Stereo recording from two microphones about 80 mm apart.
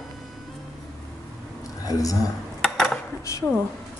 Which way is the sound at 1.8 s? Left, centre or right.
Left.